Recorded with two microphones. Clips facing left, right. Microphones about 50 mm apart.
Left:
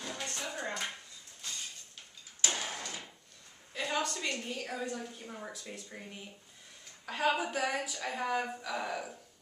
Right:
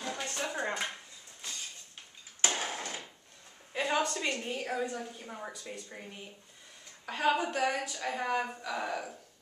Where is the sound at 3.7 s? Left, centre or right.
Centre.